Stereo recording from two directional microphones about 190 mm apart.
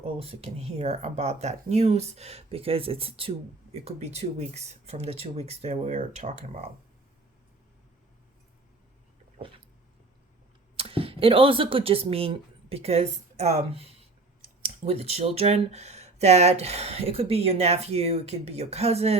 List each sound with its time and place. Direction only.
0.0 s speech: 30° right (ahead or behind)
10.8 s speech: 30° right (ahead or behind)